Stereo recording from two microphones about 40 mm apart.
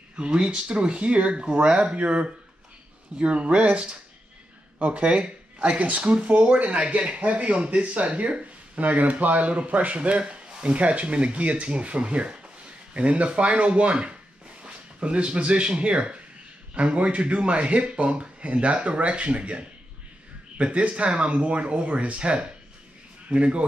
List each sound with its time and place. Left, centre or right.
0.1 s speech: right